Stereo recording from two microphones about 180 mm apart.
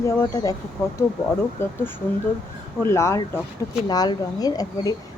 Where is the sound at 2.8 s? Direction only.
15° left (ahead or behind).